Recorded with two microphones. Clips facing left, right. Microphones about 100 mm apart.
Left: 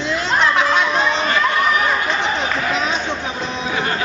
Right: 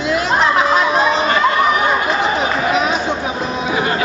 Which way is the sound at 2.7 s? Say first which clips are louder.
Right 4 dB; 10° right (ahead or behind).